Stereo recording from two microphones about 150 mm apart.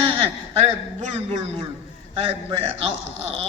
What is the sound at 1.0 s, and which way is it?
A man's voice, 50° right (ahead or behind).